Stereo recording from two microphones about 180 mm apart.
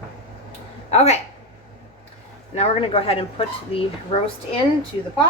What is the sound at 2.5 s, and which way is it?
Speech, 35° left (ahead or behind).